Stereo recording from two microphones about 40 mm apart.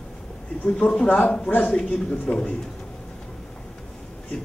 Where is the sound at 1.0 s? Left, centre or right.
Left.